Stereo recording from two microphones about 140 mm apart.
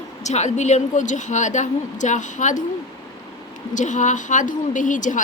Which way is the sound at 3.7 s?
60° left (ahead or behind).